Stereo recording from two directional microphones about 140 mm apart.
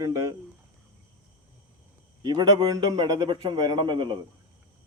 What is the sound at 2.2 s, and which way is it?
A man's voice, 30° right (ahead or behind).